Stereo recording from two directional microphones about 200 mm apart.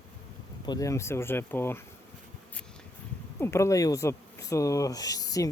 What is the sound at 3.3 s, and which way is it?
Speech, 15° left (ahead or behind).